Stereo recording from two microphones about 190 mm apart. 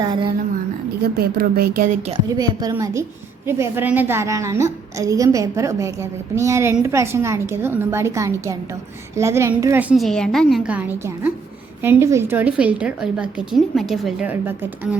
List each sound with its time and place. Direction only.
0.0 s a woman's voice: 20° right (ahead or behind)
1.0 s a woman's voice: 55° right (ahead or behind)
2.3 s a woman's voice: 20° right (ahead or behind)
9.9 s a woman's voice: centre (ahead or behind)